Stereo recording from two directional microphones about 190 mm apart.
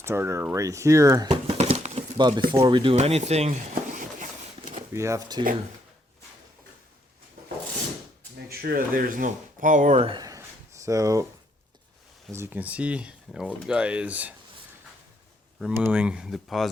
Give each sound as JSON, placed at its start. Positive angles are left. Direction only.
{"t": 0.0, "sound": "speech", "side_deg": -15}
{"t": 1.3, "sound": "a sound", "side_deg": -30}
{"t": 2.1, "sound": "speech", "side_deg": -20}
{"t": 4.9, "sound": "speech", "side_deg": -15}
{"t": 8.6, "sound": "speech", "side_deg": -50}
{"t": 12.3, "sound": "speech", "side_deg": -10}
{"t": 15.7, "sound": "speech", "side_deg": -5}